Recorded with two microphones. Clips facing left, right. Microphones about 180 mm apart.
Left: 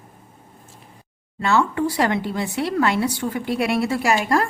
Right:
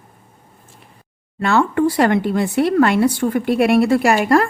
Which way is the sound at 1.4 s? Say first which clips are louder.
Right 4 dB; 55° right (ahead or behind).